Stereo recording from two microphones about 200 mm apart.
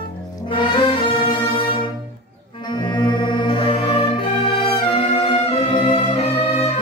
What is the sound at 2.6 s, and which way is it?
Brass instrument, 20° left (ahead or behind).